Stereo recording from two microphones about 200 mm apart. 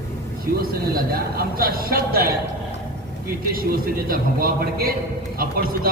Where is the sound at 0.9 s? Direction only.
45° right (ahead or behind).